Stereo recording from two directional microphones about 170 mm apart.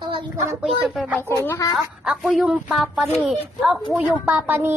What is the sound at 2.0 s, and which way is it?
A woman's voice, centre (ahead or behind).